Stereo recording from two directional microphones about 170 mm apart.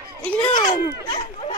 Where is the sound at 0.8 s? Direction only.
30° left (ahead or behind).